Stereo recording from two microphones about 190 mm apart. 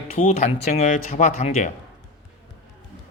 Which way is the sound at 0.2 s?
35° left (ahead or behind).